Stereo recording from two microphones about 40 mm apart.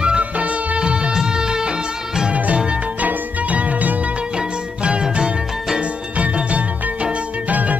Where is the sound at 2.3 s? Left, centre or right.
Right.